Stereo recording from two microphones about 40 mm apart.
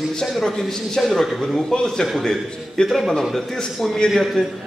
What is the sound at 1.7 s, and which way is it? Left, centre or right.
A man's voice, centre.